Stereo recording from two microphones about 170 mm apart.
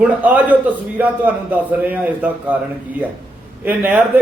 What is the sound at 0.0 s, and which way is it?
A man's voice, 10° right (ahead or behind).